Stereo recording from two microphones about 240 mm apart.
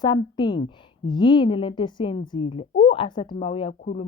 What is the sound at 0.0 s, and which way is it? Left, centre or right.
A woman's voice, centre.